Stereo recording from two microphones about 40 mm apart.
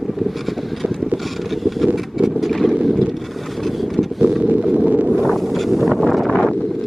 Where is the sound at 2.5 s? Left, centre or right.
Centre.